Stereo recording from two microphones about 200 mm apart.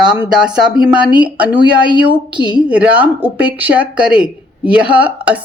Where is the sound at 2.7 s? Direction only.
10° right (ahead or behind).